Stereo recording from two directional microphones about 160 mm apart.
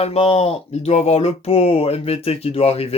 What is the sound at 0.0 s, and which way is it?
Speech, 40° left (ahead or behind).